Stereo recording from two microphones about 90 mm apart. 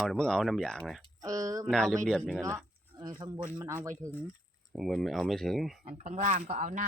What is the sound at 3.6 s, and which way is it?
Speech, 30° right (ahead or behind).